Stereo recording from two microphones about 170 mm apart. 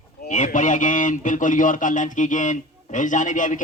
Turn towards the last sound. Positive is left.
turn(degrees=50)  # may be behind; listen again after turning